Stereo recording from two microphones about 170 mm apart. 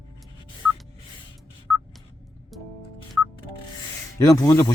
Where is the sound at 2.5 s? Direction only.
Centre (ahead or behind).